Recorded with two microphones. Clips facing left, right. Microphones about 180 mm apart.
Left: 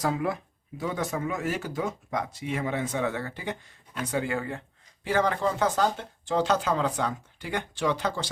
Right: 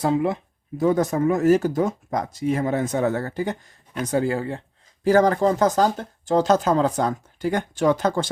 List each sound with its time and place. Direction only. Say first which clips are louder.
0.0 s speech: right 6 dB; 25° right (ahead or behind)
0.8 s speech: right 10 dB; 45° right (ahead or behind)